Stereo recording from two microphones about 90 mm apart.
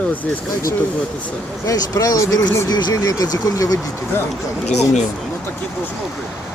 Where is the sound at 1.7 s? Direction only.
40° left (ahead or behind).